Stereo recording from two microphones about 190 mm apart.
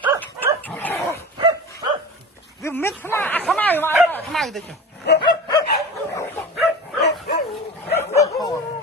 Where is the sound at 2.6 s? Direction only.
10° left (ahead or behind).